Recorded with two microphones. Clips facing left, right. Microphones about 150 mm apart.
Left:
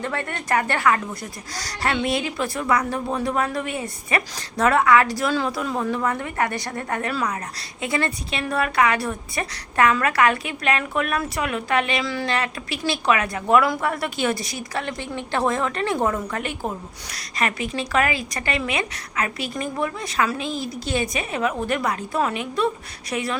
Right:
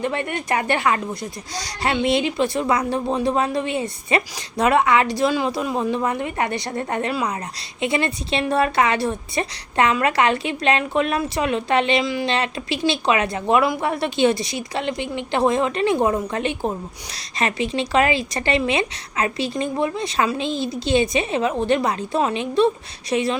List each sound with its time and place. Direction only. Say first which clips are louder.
0.0 s speech: right 4 dB; 20° right (ahead or behind)